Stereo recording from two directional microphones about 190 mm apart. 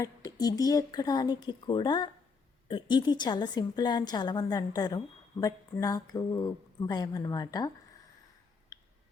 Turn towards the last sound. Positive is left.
turn(degrees=20)  # may be behind; listen again after turning